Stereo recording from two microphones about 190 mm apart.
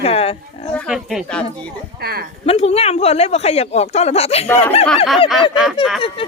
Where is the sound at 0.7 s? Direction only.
Centre (ahead or behind).